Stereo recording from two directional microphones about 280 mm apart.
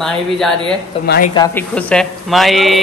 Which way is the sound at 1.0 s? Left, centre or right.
Left.